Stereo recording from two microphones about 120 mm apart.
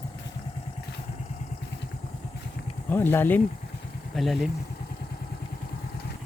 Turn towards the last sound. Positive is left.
turn(degrees=0)  # may be behind; listen again after turning